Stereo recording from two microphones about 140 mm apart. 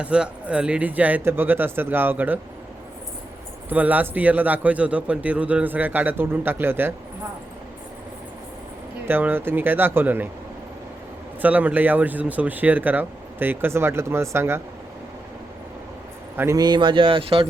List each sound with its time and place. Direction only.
0.0 s a man's voice: 10° right (ahead or behind)
3.7 s a man's voice: 10° right (ahead or behind)
9.0 s a man's voice: 15° right (ahead or behind)
11.4 s a man's voice: 10° right (ahead or behind)
16.4 s a man's voice: 20° right (ahead or behind)
16.6 s speech: 35° right (ahead or behind)